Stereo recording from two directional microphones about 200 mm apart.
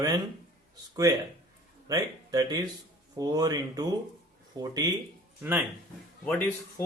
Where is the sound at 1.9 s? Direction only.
20° right (ahead or behind).